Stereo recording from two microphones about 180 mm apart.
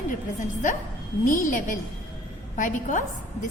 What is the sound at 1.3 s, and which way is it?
A woman's voice, 45° left (ahead or behind).